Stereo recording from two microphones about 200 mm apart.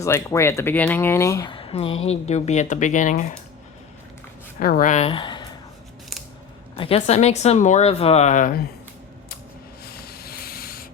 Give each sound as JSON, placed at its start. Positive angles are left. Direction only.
{"t": 0.0, "sound": "speech", "side_deg": 15}
{"t": 4.6, "sound": "a woman's voice", "side_deg": 45}
{"t": 6.7, "sound": "a woman's voice", "side_deg": 30}
{"t": 9.8, "sound": "sanding", "side_deg": 50}